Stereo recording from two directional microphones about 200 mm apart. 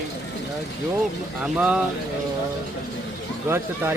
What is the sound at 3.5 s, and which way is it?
Speech, 10° right (ahead or behind).